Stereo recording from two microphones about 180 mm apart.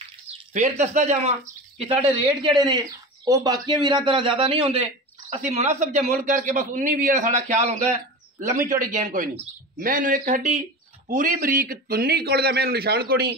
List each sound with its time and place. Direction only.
0.3 s speech: 40° right (ahead or behind)
1.8 s a man's voice: 30° right (ahead or behind); by 13.3 s 60° right (ahead or behind)